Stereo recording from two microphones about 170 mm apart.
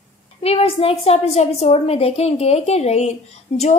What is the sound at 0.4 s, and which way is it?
A woman's voice, 35° left (ahead or behind).